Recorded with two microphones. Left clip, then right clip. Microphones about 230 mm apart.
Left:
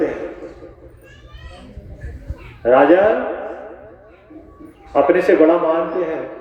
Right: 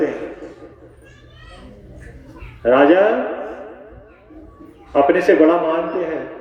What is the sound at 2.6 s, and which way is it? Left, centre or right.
Speech, right.